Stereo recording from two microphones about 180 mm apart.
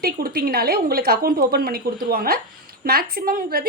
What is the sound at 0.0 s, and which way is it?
A woman's voice, 55° right (ahead or behind).